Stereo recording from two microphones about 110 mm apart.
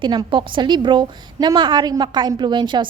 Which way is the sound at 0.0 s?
45° right (ahead or behind).